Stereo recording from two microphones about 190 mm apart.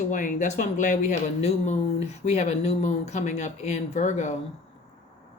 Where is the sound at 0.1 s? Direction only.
40° left (ahead or behind).